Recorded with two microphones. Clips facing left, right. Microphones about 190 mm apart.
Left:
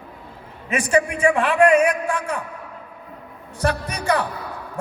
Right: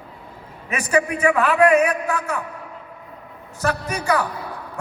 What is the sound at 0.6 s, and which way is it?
A man's voice, 25° left (ahead or behind).